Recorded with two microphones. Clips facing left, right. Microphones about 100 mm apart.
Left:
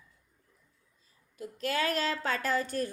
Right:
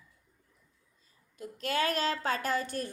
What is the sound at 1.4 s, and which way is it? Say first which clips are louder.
A woman's voice: even; 25° right (ahead or behind).